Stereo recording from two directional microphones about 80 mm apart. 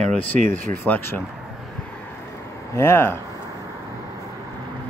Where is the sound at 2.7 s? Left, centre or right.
Left.